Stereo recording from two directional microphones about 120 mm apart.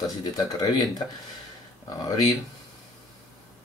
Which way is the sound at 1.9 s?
30° left (ahead or behind).